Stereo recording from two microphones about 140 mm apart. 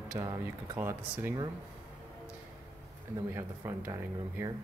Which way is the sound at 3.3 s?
20° right (ahead or behind).